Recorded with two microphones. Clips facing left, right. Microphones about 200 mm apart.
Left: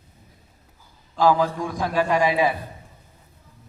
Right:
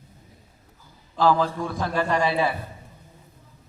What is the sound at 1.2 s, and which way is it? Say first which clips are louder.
A man's voice: left 2 dB; 15° left (ahead or behind).